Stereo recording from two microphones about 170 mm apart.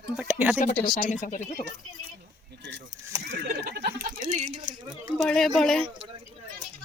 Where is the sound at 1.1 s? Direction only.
45° left (ahead or behind).